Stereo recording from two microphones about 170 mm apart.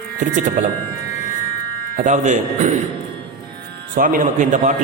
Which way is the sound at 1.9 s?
45° right (ahead or behind).